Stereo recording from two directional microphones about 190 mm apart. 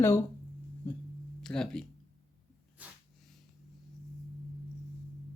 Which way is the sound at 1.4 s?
5° left (ahead or behind).